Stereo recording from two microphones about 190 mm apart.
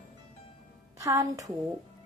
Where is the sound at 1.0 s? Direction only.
15° right (ahead or behind).